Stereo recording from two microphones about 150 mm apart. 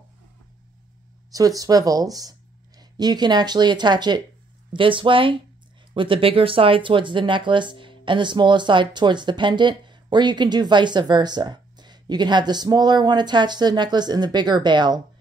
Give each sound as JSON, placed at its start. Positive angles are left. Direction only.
{"t": 1.3, "sound": "speech", "side_deg": -25}